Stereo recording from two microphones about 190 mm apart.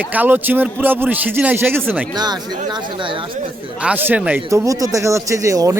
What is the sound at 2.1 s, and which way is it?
Speech, 20° right (ahead or behind).